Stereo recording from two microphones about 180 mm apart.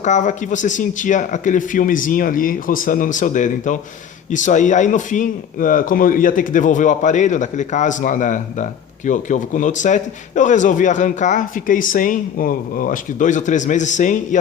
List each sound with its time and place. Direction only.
0.0 s speech: 40° left (ahead or behind)